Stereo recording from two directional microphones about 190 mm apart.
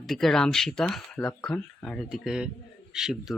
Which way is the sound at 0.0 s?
Centre (ahead or behind).